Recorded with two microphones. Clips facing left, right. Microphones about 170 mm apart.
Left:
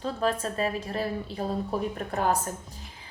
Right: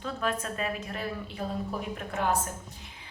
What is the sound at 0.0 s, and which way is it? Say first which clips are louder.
A woman's voice: left 4 dB; 30° left (ahead or behind).